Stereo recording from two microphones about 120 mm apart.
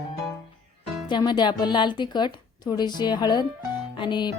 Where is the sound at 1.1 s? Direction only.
40° left (ahead or behind).